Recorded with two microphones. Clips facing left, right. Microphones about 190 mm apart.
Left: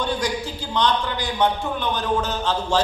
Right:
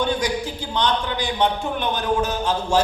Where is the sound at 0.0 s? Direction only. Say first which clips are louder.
Right 2 dB; 15° right (ahead or behind).